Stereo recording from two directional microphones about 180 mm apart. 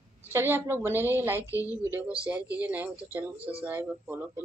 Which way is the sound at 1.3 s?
15° left (ahead or behind).